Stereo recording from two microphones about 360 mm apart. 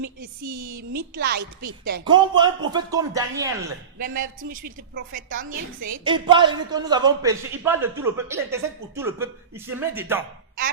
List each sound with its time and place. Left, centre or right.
0.4 s a woman's voice: right
1.1 s a woman's voice: right
1.4 s a woman's voice: right
2.0 s a woman's voice: centre
3.9 s a woman's voice: right; by 10.2 s centre